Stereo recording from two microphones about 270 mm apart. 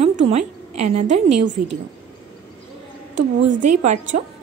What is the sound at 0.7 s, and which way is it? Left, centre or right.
Speech, right.